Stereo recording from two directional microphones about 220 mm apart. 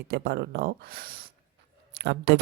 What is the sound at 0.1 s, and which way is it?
Speech, 45° right (ahead or behind).